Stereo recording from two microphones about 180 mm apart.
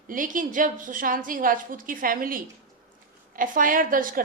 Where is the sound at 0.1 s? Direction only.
45° right (ahead or behind).